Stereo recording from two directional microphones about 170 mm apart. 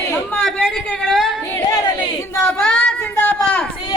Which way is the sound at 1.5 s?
20° left (ahead or behind).